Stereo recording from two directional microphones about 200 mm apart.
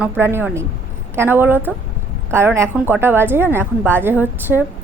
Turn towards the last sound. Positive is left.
turn(degrees=-10)  # may be behind; listen again after turning